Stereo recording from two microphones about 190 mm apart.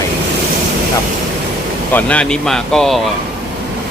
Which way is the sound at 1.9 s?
5° left (ahead or behind).